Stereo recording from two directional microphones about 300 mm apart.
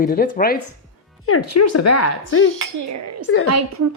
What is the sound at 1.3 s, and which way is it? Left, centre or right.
Speech, left.